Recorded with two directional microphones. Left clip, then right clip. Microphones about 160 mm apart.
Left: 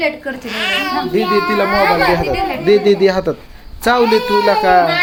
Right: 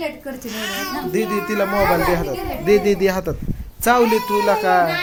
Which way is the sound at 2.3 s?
10° left (ahead or behind).